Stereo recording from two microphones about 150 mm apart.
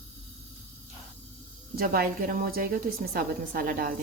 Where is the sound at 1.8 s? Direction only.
75° right (ahead or behind).